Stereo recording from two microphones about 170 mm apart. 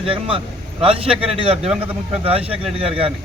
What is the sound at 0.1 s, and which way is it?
A man's voice, 30° right (ahead or behind).